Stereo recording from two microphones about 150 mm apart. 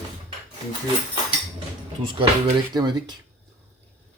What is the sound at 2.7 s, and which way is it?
Speech, 30° right (ahead or behind).